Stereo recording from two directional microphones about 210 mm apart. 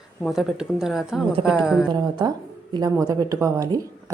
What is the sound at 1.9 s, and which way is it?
A woman's voice, 20° right (ahead or behind).